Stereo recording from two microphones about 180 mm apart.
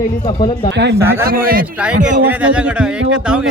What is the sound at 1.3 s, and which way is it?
Speech, 55° right (ahead or behind).